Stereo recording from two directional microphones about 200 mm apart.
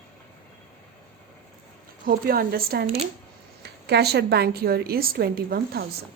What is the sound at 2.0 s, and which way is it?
A woman's voice, 50° right (ahead or behind).